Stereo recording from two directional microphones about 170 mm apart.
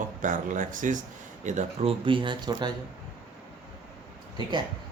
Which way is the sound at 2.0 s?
30° right (ahead or behind).